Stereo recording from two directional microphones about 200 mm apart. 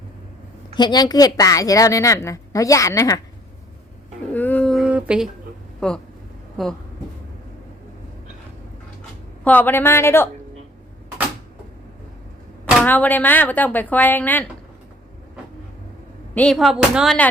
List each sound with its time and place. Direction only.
0.7 s a woman's voice: 20° left (ahead or behind)
4.4 s a sound: 10° left (ahead or behind)
5.8 s a woman's voice: 5° left (ahead or behind)
9.4 s a woman's voice: 5° left (ahead or behind)
12.8 s a woman's voice: 10° left (ahead or behind)
16.3 s a woman's voice: 5° left (ahead or behind)